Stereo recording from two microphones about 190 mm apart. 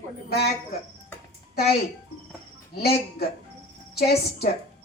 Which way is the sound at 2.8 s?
55° left (ahead or behind).